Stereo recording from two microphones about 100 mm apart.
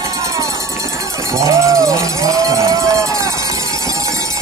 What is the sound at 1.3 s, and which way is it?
Cowbell, 30° right (ahead or behind).